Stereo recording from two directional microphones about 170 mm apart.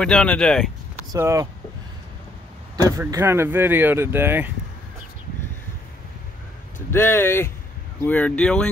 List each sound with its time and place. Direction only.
0.0 s speech: 5° left (ahead or behind)
1.1 s speech: 20° right (ahead or behind)
3.0 s speech: 15° right (ahead or behind)
6.9 s speech: 15° left (ahead or behind)